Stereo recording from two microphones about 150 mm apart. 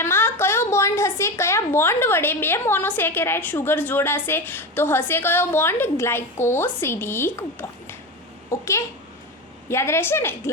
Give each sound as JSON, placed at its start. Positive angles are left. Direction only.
{"t": 0.0, "sound": "a woman's voice", "side_deg": 15}